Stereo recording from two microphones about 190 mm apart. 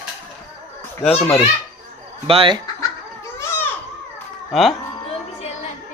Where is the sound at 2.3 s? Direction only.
30° right (ahead or behind).